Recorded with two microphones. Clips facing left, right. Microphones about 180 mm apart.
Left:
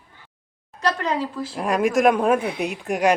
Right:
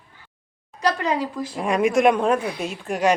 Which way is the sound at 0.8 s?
10° right (ahead or behind).